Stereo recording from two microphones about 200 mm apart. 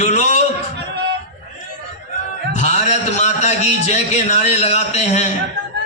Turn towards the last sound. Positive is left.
turn(degrees=35)  # may be behind; listen again after turning